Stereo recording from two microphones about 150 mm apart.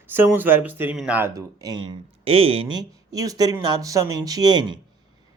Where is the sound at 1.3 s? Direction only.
25° right (ahead or behind); by 2.7 s 40° right (ahead or behind).